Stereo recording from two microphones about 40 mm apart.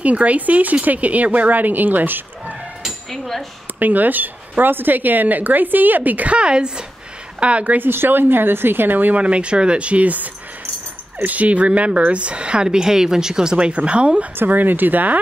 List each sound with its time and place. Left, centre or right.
0.0 s speech: right
3.1 s a sound: centre
3.8 s a woman's voice: right
6.3 s speech: right
7.7 s speech: right
9.1 s speech: right
14.3 s a woman's voice: right